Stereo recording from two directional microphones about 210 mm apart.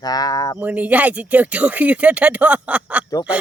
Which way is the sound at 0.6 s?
5° right (ahead or behind).